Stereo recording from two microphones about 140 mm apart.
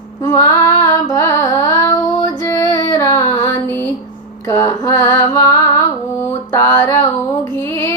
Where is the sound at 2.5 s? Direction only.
25° left (ahead or behind).